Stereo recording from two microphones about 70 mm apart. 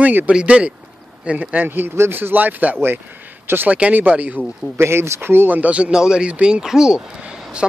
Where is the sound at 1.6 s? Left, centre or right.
Right.